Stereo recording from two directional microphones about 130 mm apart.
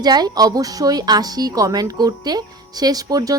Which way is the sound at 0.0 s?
30° right (ahead or behind).